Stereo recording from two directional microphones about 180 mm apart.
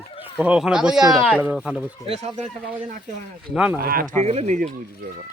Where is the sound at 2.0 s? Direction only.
35° right (ahead or behind).